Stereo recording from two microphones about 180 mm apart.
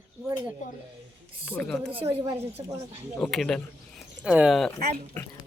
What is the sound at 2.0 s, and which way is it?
Speech, 20° right (ahead or behind).